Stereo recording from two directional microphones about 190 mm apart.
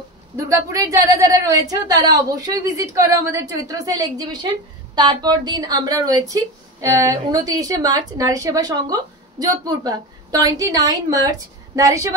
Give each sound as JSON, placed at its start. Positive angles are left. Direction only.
{"t": 0.4, "sound": "a woman's voice", "side_deg": -15}